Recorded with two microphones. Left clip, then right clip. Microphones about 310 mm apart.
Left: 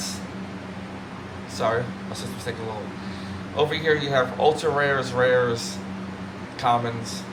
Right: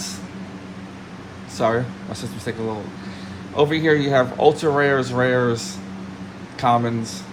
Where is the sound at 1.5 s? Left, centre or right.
Centre.